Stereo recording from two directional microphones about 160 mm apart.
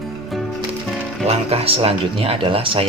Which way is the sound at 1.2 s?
40° right (ahead or behind).